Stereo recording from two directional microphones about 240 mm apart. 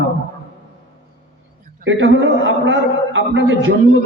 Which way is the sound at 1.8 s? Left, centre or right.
Right.